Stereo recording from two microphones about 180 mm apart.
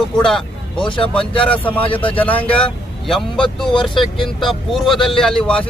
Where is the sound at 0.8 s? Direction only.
30° left (ahead or behind).